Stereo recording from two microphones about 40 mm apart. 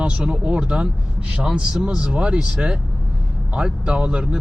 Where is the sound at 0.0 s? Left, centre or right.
Right.